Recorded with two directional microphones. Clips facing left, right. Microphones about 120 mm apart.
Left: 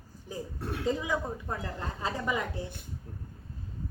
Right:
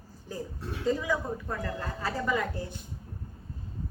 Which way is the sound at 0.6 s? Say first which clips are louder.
Left 2 dB; 60° left (ahead or behind).